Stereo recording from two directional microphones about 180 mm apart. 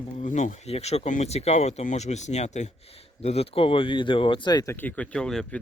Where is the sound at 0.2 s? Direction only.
45° left (ahead or behind).